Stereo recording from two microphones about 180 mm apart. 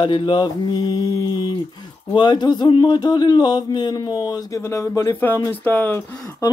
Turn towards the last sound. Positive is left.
turn(degrees=15)  # may be behind; listen again after turning